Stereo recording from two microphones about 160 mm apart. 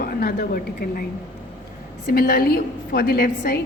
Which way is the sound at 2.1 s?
65° left (ahead or behind).